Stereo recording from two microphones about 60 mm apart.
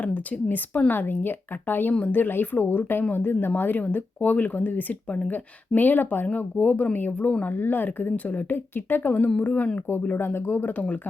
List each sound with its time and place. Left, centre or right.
0.0 s speech: left
10.2 s speech: left